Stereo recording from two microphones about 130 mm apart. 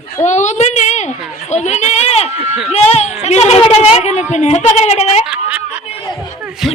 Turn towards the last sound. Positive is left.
turn(degrees=-5)  # may be behind; listen again after turning